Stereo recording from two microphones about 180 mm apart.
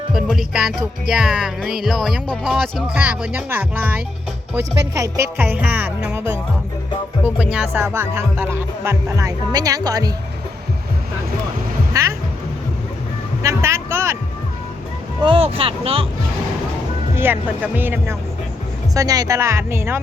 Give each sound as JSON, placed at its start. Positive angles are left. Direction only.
{"t": 0.1, "sound": "music", "side_deg": -5}
{"t": 11.9, "sound": "music", "side_deg": -20}
{"t": 13.4, "sound": "music", "side_deg": -15}
{"t": 15.2, "sound": "speech", "side_deg": -30}
{"t": 17.2, "sound": "music", "side_deg": -10}